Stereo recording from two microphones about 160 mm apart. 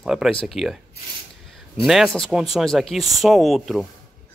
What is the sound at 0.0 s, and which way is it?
Speech, centre (ahead or behind).